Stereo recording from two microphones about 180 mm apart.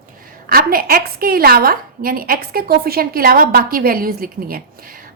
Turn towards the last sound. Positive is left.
turn(degrees=-50)  # may be behind; listen again after turning